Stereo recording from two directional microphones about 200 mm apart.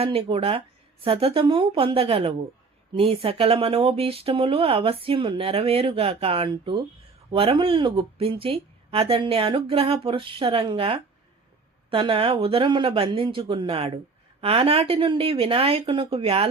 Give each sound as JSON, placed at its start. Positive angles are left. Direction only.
{"t": 0.0, "sound": "speech", "side_deg": -30}